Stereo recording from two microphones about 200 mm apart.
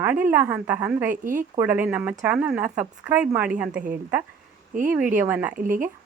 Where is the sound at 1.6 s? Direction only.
10° right (ahead or behind).